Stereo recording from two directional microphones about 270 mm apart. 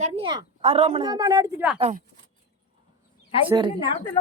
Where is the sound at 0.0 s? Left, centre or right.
Centre.